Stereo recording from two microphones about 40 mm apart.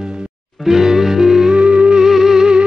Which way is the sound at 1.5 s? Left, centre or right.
Right.